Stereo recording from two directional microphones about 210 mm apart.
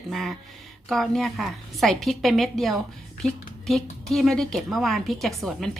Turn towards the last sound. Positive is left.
turn(degrees=0)  # may be behind; listen again after turning